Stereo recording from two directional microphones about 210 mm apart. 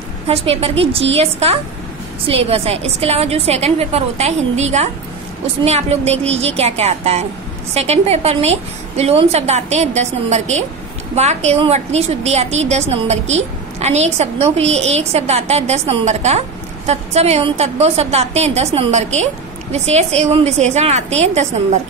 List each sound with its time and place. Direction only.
0.3 s a woman's voice: 30° right (ahead or behind)